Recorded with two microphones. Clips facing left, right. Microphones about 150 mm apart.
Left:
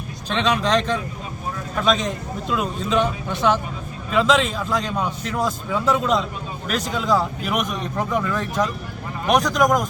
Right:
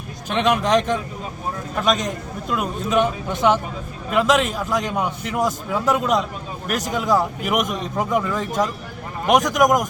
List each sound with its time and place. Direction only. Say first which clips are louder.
0.3 s a man's voice: right 2 dB; 15° right (ahead or behind)